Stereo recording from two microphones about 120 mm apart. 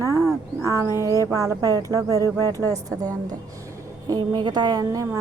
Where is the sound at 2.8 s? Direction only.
30° right (ahead or behind).